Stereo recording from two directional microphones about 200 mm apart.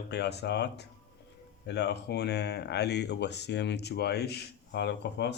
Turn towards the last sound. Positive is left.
turn(degrees=60)  # may be behind; listen again after turning